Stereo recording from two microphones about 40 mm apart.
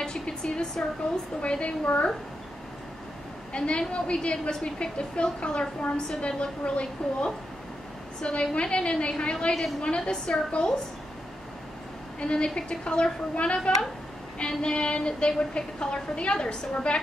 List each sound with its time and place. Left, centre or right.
0.0 s a sound: left
1.4 s a woman's voice: left
3.5 s a woman's voice: left
12.2 s a woman's voice: left